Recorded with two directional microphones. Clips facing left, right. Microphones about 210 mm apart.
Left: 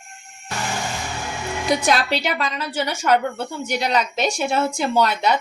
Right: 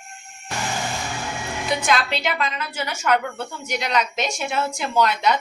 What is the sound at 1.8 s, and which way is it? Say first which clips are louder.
Speech: left 2 dB; 35° left (ahead or behind).